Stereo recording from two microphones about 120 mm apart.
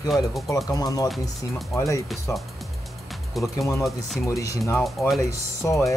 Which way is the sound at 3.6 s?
25° left (ahead or behind).